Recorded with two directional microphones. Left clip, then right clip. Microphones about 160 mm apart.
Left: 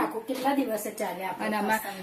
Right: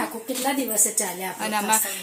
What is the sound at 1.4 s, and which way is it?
Speech, 5° left (ahead or behind).